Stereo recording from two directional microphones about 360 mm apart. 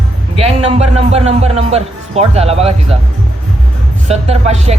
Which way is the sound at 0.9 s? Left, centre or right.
Centre.